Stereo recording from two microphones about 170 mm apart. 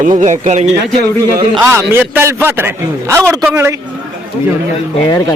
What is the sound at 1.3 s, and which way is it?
Speech, 15° right (ahead or behind).